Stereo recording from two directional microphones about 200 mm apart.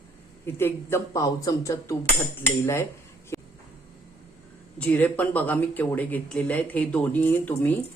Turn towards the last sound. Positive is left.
turn(degrees=10)  # may be behind; listen again after turning